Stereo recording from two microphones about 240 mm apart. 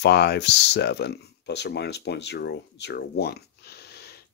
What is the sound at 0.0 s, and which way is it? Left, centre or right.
Speech, left.